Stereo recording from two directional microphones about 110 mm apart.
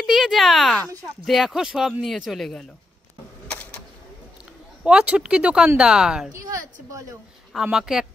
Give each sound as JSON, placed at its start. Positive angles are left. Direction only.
{"t": 0.0, "sound": "speech", "side_deg": -5}
{"t": 4.8, "sound": "speech", "side_deg": -10}
{"t": 6.3, "sound": "a woman's voice", "side_deg": -30}
{"t": 7.6, "sound": "speech", "side_deg": -5}